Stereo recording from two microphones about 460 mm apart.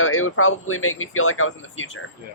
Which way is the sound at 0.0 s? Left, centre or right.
Left.